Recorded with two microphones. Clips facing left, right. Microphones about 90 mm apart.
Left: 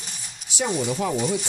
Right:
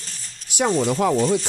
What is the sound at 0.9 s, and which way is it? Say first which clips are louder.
Speech: right 6 dB; 60° right (ahead or behind).